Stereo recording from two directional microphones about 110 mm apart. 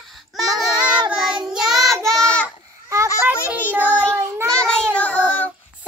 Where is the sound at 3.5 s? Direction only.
15° right (ahead or behind).